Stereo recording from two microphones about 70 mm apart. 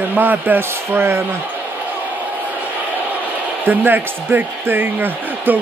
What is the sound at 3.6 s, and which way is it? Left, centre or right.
Speech, right.